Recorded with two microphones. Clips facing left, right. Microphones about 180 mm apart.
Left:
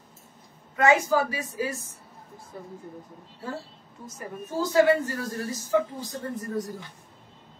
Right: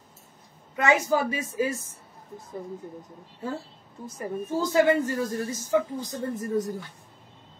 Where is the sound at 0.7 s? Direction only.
20° right (ahead or behind).